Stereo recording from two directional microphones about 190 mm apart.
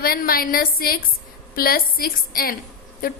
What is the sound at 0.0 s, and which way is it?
A woman's voice, 50° left (ahead or behind).